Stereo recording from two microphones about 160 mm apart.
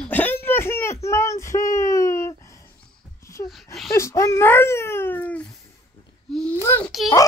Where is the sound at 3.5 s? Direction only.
Centre (ahead or behind).